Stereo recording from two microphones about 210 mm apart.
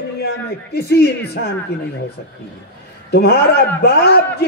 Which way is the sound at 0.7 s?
50° left (ahead or behind).